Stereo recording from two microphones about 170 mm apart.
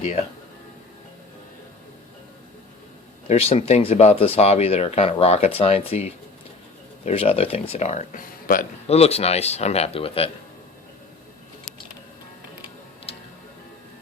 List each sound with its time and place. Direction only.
0.0 s speech: 35° left (ahead or behind)
3.2 s speech: 35° left (ahead or behind); by 9.0 s 50° left (ahead or behind)
9.0 s speech: 35° left (ahead or behind)
13.1 s music: 35° left (ahead or behind)